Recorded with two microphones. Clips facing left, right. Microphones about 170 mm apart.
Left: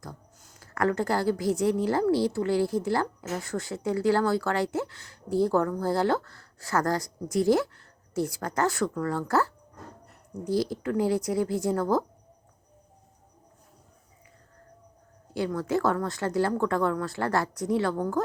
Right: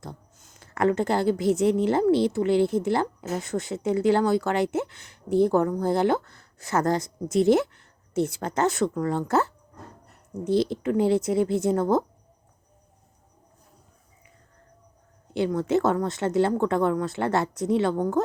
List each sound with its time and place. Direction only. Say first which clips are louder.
0.0 s a woman's voice: right 3 dB; 25° right (ahead or behind)
15.3 s a woman's voice: right 4 dB; 20° right (ahead or behind)